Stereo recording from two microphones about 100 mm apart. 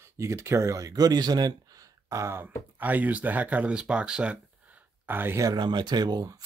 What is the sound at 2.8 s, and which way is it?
Speech, 15° right (ahead or behind).